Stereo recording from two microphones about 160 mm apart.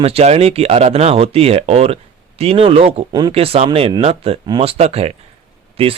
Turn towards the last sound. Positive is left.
turn(degrees=-40)  # may be behind; listen again after turning